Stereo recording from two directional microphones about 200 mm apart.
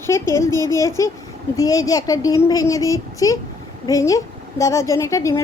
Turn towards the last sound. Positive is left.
turn(degrees=15)  # may be behind; listen again after turning